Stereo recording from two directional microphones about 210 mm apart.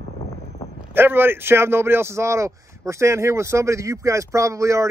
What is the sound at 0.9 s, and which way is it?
A man's voice, 10° right (ahead or behind).